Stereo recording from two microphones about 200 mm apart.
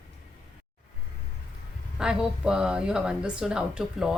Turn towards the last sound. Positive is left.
turn(degrees=-5)  # may be behind; listen again after turning